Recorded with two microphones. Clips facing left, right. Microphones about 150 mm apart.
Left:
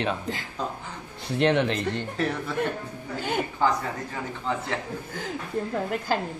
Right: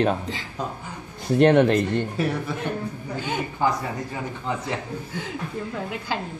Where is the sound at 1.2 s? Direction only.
45° right (ahead or behind).